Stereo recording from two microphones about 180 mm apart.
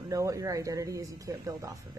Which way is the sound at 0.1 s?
15° right (ahead or behind).